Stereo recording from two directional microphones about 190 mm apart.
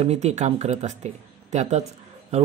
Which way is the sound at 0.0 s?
35° right (ahead or behind).